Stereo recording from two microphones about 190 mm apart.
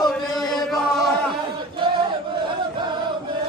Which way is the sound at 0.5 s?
Centre (ahead or behind).